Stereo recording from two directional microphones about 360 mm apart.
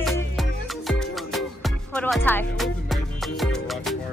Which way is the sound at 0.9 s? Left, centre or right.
Centre.